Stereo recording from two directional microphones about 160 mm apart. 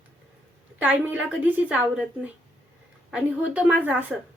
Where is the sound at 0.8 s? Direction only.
10° right (ahead or behind).